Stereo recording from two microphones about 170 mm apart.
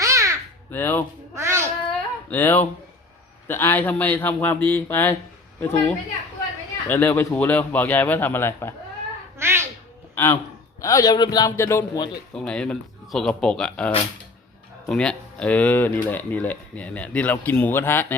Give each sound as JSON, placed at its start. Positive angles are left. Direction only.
{"t": 0.0, "sound": "caw", "side_deg": -20}
{"t": 0.7, "sound": "speech", "side_deg": 10}
{"t": 1.4, "sound": "a sound", "side_deg": -15}
{"t": 2.3, "sound": "speech", "side_deg": 10}
{"t": 9.4, "sound": "a sound", "side_deg": -15}
{"t": 10.2, "sound": "a man's voice", "side_deg": 15}
{"t": 12.3, "sound": "speech", "side_deg": 5}